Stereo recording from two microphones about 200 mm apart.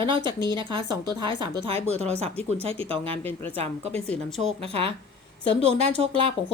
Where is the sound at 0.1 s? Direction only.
25° right (ahead or behind).